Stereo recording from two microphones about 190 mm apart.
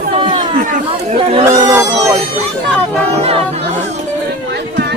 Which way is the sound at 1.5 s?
15° right (ahead or behind).